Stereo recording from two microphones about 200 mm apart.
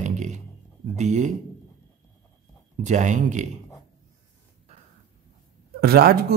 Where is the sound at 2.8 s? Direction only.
40° right (ahead or behind).